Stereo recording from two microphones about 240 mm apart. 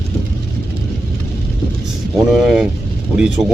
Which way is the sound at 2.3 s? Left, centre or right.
Centre.